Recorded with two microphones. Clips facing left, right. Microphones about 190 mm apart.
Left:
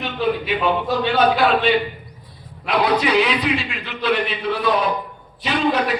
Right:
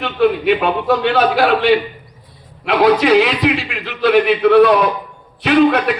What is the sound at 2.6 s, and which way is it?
A man's voice, 85° right.